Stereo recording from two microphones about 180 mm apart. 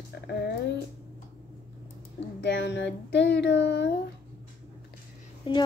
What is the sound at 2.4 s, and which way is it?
Speech, 70° left (ahead or behind).